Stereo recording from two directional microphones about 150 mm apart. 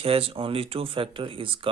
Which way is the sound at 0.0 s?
40° right (ahead or behind).